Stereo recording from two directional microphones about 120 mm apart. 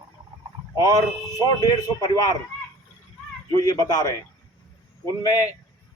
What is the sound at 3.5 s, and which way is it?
Speech, 35° left (ahead or behind).